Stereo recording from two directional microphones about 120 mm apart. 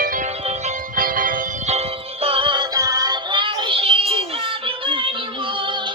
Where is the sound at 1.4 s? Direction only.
65° right (ahead or behind); by 5.9 s 40° right (ahead or behind).